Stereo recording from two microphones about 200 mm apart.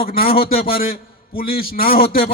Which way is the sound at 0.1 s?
45° left (ahead or behind).